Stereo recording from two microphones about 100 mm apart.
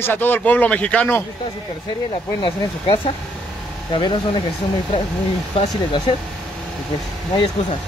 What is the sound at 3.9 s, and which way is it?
Speech, 55° left (ahead or behind).